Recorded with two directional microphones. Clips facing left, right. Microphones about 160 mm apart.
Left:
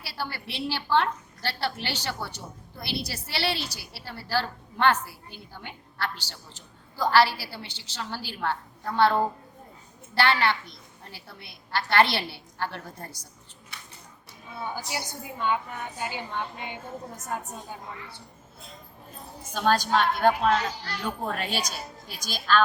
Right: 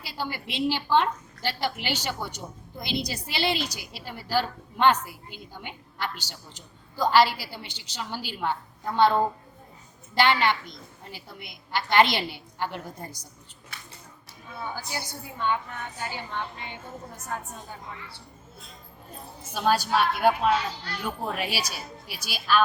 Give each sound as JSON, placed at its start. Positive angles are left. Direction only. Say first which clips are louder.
{"t": 0.0, "sound": "a woman's voice", "louder": "right 2 dB", "side_deg": -15}
{"t": 14.6, "sound": "a woman's voice", "louder": "left 1 dB", "side_deg": 15}
{"t": 19.5, "sound": "a woman's voice", "louder": "even", "side_deg": -10}